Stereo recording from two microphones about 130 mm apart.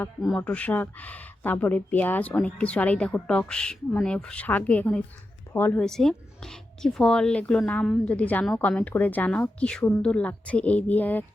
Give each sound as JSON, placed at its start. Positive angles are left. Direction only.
{"t": 0.2, "sound": "a woman's voice", "side_deg": 5}
{"t": 5.8, "sound": "a woman's voice", "side_deg": 5}